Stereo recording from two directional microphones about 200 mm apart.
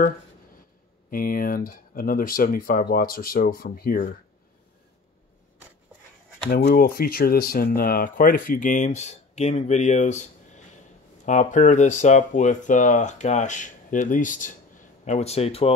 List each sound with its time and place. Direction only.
1.1 s speech: 45° left (ahead or behind)
6.5 s speech: 50° left (ahead or behind); by 15.7 s 30° left (ahead or behind)